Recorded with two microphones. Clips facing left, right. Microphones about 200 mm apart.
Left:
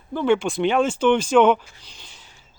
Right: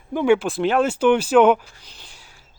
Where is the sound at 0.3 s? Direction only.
Centre (ahead or behind).